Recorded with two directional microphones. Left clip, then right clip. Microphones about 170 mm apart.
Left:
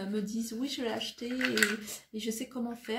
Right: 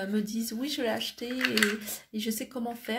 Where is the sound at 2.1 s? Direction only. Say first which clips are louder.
Right 2 dB; 45° right (ahead or behind).